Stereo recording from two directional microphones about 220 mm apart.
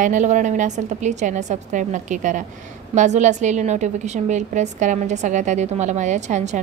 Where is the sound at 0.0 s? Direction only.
35° right (ahead or behind).